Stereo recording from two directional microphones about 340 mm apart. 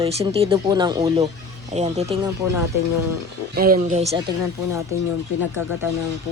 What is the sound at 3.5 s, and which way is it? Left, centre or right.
Speech, right.